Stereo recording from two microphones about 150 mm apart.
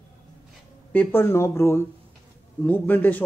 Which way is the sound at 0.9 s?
10° left (ahead or behind).